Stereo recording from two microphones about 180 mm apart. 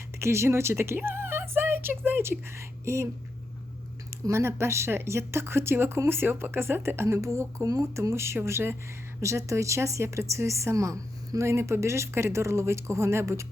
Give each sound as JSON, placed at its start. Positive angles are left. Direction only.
{"t": 0.2, "sound": "speech", "side_deg": -15}
{"t": 4.3, "sound": "speech", "side_deg": -15}